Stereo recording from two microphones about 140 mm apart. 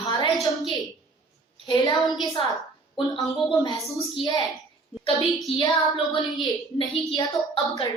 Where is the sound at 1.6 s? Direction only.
30° left (ahead or behind).